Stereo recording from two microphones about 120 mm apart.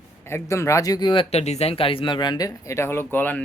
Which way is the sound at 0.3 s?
20° left (ahead or behind).